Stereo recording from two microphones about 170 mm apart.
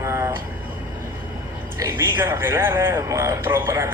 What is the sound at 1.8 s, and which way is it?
A man's voice, 15° right (ahead or behind).